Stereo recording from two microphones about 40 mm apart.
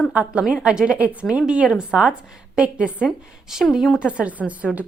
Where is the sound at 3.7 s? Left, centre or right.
Centre.